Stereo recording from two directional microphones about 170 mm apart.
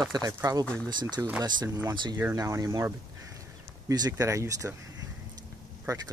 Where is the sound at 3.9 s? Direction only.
20° right (ahead or behind).